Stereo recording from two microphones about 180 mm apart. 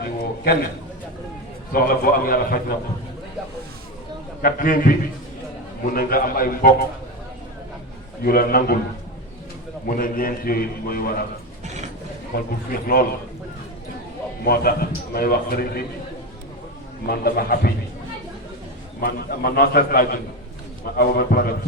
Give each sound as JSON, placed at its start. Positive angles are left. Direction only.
{"t": 0.0, "sound": "a sound", "side_deg": 60}
{"t": 1.7, "sound": "a man's voice", "side_deg": 55}
{"t": 4.4, "sound": "a man's voice", "side_deg": 50}
{"t": 8.2, "sound": "a man's voice", "side_deg": 55}
{"t": 9.8, "sound": "a man's voice", "side_deg": 50}
{"t": 12.3, "sound": "a man's voice", "side_deg": 55}
{"t": 14.4, "sound": "a man's voice", "side_deg": 55}
{"t": 17.1, "sound": "a man's voice", "side_deg": 55}
{"t": 18.9, "sound": "a man's voice", "side_deg": 55}